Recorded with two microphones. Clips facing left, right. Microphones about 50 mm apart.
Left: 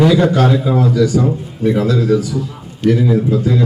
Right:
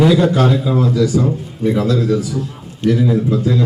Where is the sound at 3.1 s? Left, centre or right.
Left.